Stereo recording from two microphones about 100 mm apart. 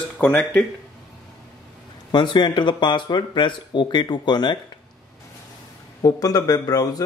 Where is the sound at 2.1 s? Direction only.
50° left (ahead or behind).